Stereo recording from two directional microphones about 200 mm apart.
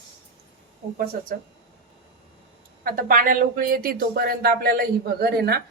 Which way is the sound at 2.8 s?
45° right (ahead or behind).